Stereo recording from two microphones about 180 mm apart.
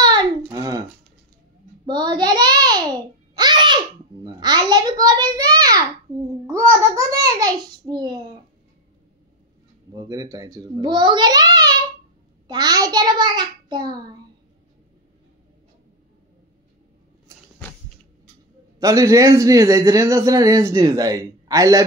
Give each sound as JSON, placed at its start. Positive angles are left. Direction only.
{"t": 0.0, "sound": "a sound", "side_deg": -25}
{"t": 1.9, "sound": "babbling", "side_deg": -25}
{"t": 6.4, "sound": "a child's voice", "side_deg": -15}
{"t": 9.9, "sound": "a man's voice", "side_deg": -20}
{"t": 18.8, "sound": "a man's voice", "side_deg": -20}